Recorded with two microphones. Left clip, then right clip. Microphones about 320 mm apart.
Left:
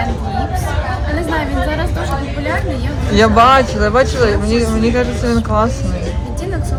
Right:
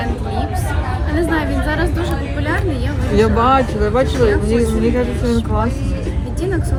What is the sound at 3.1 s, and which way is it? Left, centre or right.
Speech, left.